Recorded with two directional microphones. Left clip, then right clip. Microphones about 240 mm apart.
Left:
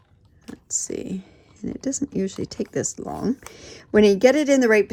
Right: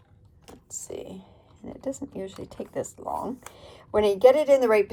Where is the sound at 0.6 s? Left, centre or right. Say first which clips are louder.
Left 8 dB; left.